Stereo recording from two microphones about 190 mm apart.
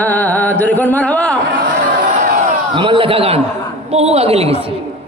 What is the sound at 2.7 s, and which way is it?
A woman's voice, 25° right (ahead or behind).